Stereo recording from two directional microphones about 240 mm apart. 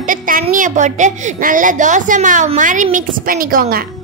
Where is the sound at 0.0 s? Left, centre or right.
Right.